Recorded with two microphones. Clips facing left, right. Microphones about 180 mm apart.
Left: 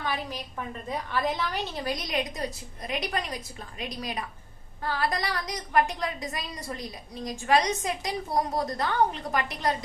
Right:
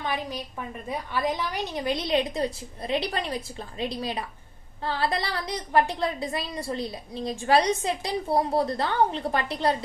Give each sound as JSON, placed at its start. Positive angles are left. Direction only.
{"t": 0.0, "sound": "a woman's voice", "side_deg": -20}